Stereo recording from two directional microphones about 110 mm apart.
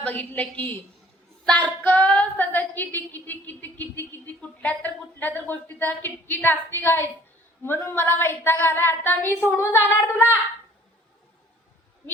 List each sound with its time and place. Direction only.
0.0 s speech: 15° left (ahead or behind)
7.6 s female singing: 20° left (ahead or behind)